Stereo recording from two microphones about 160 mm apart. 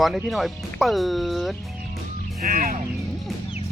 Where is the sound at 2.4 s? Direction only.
65° right (ahead or behind).